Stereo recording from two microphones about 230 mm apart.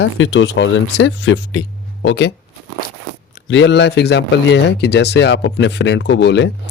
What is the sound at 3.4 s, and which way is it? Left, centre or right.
Speech, left.